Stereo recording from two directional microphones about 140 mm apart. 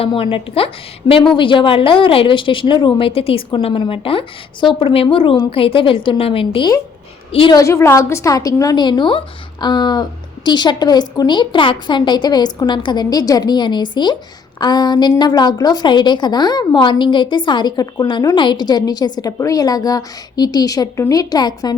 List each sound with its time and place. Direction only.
0.0 s a woman's voice: 40° left (ahead or behind)
7.5 s a woman's voice: 20° left (ahead or behind)